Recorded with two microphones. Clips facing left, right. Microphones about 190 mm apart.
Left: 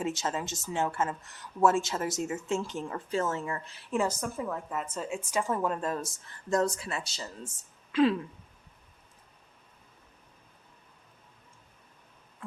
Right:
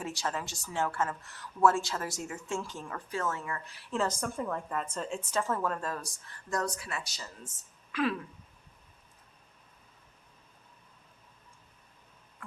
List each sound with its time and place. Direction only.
0.0 s a woman's voice: 20° left (ahead or behind)
4.0 s a woman's voice: 5° left (ahead or behind); by 7.3 s 25° left (ahead or behind)
12.4 s a sound: 20° left (ahead or behind)